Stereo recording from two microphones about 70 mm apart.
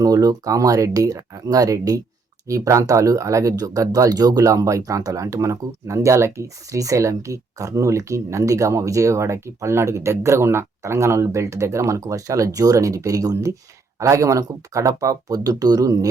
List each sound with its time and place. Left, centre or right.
0.0 s speech: right
14.0 s speech: right